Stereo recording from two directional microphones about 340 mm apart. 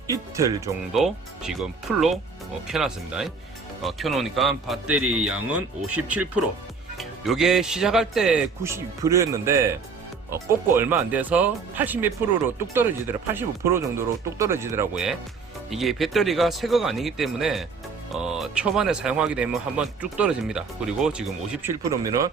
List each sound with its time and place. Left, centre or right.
0.1 s speech: centre
5.5 s speech: right
7.0 s speech: centre